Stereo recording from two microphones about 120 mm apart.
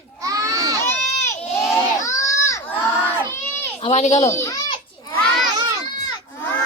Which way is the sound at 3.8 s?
65° left (ahead or behind).